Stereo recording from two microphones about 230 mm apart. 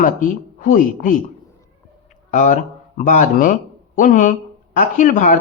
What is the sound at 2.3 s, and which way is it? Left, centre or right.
Speech, left.